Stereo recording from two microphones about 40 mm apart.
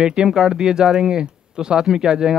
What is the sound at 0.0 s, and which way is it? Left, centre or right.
Speech, centre.